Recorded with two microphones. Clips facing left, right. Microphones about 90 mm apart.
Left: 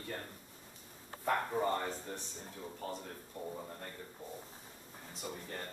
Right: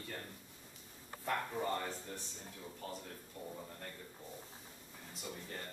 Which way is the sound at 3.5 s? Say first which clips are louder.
Left 4 dB; 20° left (ahead or behind).